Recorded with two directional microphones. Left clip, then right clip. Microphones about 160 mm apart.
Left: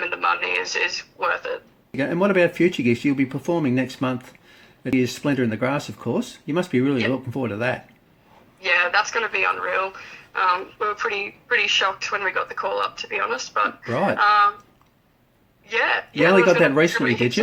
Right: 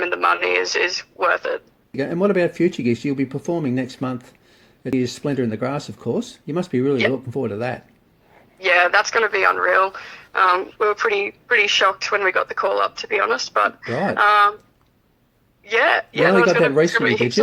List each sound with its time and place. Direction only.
0.0 s speech: 45° right (ahead or behind)
2.0 s speech: 20° right (ahead or behind)
8.6 s speech: 45° right (ahead or behind)
13.9 s speech: 20° right (ahead or behind)
15.6 s speech: 45° right (ahead or behind)
16.5 s speech: 20° right (ahead or behind)
16.9 s speech: 45° right (ahead or behind)